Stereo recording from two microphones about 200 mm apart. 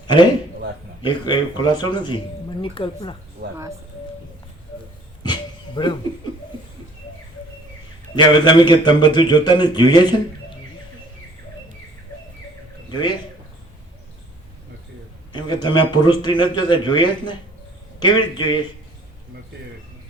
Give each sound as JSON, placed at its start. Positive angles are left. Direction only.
{"t": 1.0, "sound": "speech", "side_deg": 25}
{"t": 3.4, "sound": "speech", "side_deg": -55}
{"t": 5.3, "sound": "a sound", "side_deg": 20}
{"t": 8.1, "sound": "speech", "side_deg": 20}
{"t": 12.9, "sound": "speech", "side_deg": 20}
{"t": 15.4, "sound": "speech", "side_deg": 20}